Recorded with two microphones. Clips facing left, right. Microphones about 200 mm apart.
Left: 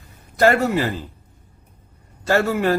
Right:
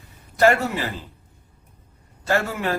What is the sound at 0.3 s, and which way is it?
Speech, 40° left (ahead or behind).